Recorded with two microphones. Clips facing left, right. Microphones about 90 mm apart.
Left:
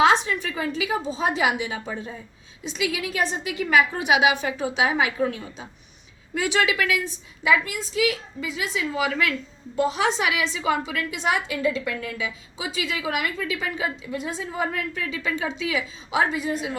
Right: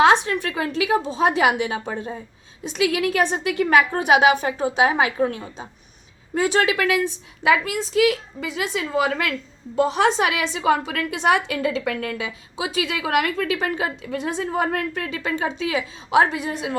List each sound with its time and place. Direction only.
0.0 s a woman's voice: 55° right (ahead or behind)
2.6 s a woman's voice: 55° right (ahead or behind)
7.4 s a woman's voice: 65° right (ahead or behind)
12.1 s a woman's voice: 50° right (ahead or behind)
14.1 s a woman's voice: 70° right (ahead or behind)